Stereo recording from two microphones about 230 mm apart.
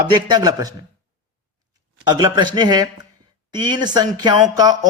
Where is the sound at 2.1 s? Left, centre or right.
Centre.